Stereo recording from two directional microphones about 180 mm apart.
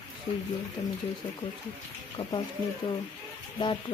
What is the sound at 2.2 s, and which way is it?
Speech, 25° left (ahead or behind).